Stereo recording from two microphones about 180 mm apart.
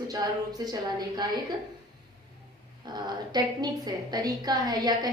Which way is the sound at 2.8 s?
25° right (ahead or behind).